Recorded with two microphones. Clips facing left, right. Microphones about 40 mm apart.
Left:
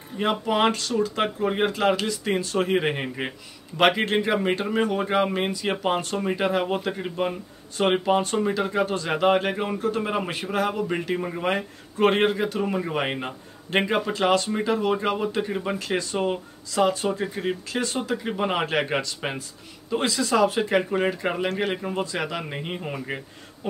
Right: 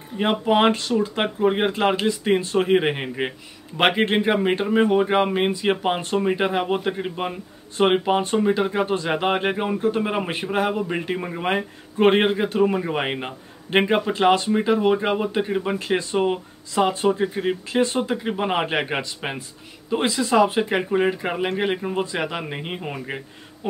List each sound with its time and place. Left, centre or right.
0.2 s a man's voice: right
10.0 s a man's voice: centre
12.6 s a man's voice: centre